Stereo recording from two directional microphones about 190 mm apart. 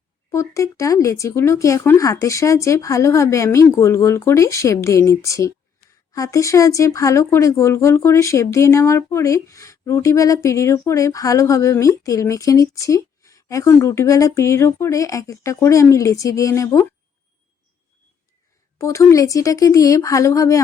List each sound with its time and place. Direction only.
0.3 s speech: 15° left (ahead or behind)
18.8 s speech: 15° left (ahead or behind)